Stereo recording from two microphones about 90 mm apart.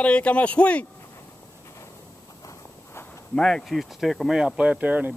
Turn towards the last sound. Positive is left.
turn(degrees=-20)  # may be behind; listen again after turning